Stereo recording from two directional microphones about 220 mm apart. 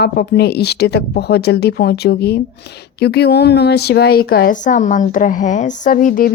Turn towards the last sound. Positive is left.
turn(degrees=40)  # may be behind; listen again after turning